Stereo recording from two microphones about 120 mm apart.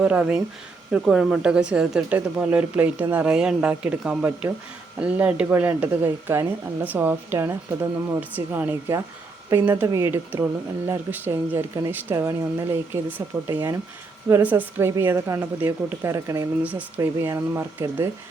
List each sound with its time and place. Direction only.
0.0 s speech: 10° right (ahead or behind)